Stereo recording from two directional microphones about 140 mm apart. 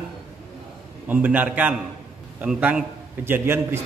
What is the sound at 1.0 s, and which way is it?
A man's voice, 10° right (ahead or behind).